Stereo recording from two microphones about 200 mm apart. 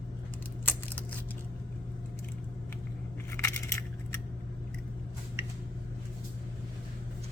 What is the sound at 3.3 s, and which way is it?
Coin, 15° left (ahead or behind).